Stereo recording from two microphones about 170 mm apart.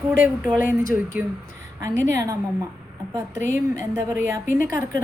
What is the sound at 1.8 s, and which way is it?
Speech, 20° right (ahead or behind).